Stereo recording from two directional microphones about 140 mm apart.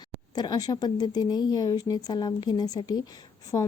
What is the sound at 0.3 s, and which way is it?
A woman's voice, 30° left (ahead or behind).